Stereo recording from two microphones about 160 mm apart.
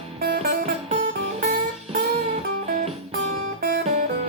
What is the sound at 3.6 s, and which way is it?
Music, 65° right (ahead or behind).